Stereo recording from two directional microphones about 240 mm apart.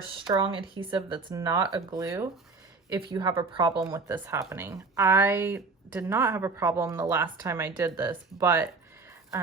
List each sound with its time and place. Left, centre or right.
0.3 s speech: right